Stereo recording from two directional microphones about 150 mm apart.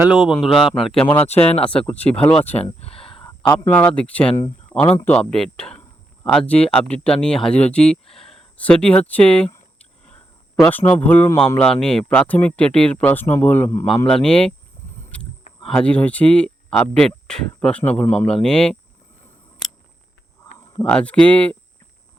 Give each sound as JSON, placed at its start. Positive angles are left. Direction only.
{"t": 0.0, "sound": "speech", "side_deg": -5}
{"t": 2.7, "sound": "a sound", "side_deg": 40}
{"t": 3.7, "sound": "speech", "side_deg": 10}
{"t": 10.7, "sound": "speech", "side_deg": 10}
{"t": 15.1, "sound": "a sound", "side_deg": 10}
{"t": 15.6, "sound": "speech", "side_deg": 5}
{"t": 20.8, "sound": "speech", "side_deg": 10}